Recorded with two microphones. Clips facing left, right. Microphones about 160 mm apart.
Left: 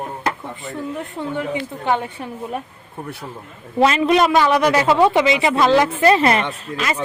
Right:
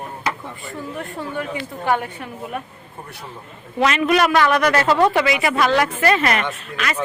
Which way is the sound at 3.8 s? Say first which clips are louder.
Left 2 dB; 30° left (ahead or behind).